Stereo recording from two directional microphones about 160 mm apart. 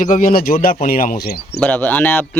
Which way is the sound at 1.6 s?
10° left (ahead or behind).